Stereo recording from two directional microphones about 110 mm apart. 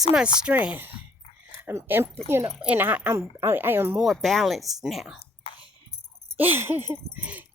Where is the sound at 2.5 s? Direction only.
10° right (ahead or behind).